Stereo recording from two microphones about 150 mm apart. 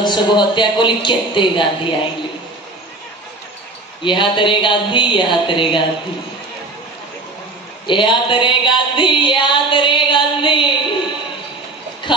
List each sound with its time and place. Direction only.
0.0 s speech: 30° left (ahead or behind)
4.0 s speech: 35° left (ahead or behind)
7.8 s music: 30° left (ahead or behind)